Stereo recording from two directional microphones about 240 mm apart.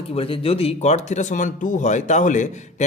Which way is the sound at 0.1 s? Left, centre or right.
Left.